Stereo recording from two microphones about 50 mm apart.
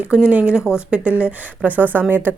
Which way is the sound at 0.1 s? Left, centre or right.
Centre.